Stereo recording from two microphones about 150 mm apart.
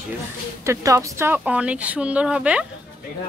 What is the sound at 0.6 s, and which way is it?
Speech, 20° right (ahead or behind).